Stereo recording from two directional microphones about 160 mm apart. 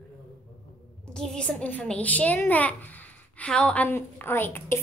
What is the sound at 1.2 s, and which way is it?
A child's voice, 5° left (ahead or behind).